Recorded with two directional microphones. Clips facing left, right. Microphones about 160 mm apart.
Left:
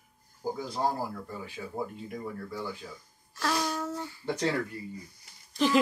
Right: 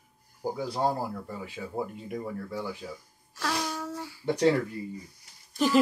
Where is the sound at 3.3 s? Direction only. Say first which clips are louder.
Left 1 dB; 5° right (ahead or behind).